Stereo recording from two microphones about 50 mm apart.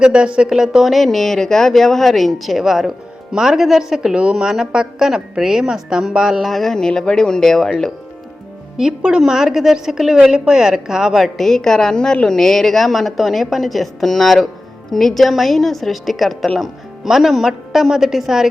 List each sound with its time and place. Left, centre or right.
0.0 s a woman's voice: centre
0.5 s a woman's voice: centre
6.4 s a woman's voice: centre
8.8 s a woman's voice: centre
11.3 s a woman's voice: centre